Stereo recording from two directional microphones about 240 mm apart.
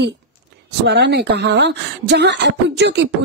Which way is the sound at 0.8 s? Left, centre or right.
Right.